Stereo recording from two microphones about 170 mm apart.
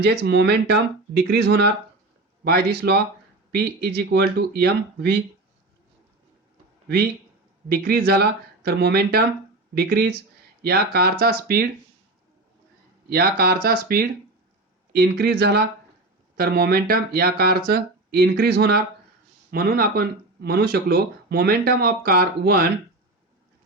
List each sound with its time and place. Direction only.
0.0 s speech: 85° right
2.4 s speech: 65° right (ahead or behind)
7.7 s speech: 65° right (ahead or behind)
13.1 s speech: 65° right (ahead or behind)